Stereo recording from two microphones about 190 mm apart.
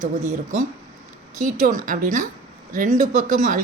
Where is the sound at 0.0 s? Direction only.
40° right (ahead or behind).